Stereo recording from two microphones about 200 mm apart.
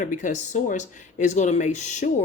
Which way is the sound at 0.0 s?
40° left (ahead or behind).